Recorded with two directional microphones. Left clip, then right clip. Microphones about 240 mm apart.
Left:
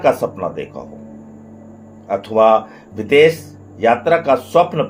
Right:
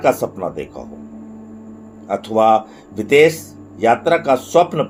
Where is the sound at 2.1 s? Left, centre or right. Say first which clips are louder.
Left 1 dB; right.